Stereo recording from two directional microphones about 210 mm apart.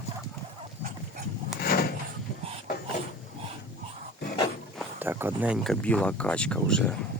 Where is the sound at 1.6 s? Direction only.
45° left (ahead or behind).